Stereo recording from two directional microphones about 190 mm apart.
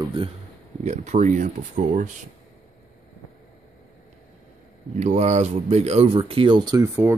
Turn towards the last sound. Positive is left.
turn(degrees=-10)  # may be behind; listen again after turning